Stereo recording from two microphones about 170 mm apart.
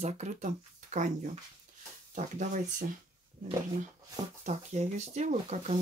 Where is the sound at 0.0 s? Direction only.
45° right (ahead or behind).